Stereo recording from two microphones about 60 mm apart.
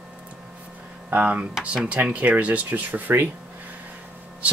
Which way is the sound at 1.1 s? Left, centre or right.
Right.